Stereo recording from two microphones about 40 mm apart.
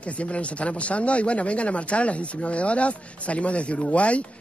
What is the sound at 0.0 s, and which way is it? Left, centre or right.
Speech, left.